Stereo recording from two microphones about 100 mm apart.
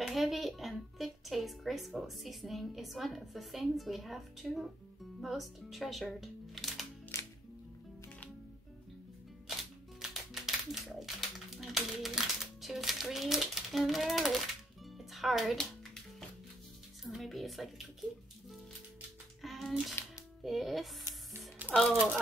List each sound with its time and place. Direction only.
0.0 s speech: centre (ahead or behind)
7.1 s music: 25° left (ahead or behind)
9.6 s music: 5° right (ahead or behind)
17.0 s speech: centre (ahead or behind)
19.4 s a sound: centre (ahead or behind)
20.4 s speech: centre (ahead or behind)
21.6 s a sound: 15° right (ahead or behind)